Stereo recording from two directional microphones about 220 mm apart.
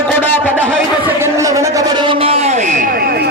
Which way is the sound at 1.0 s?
15° right (ahead or behind).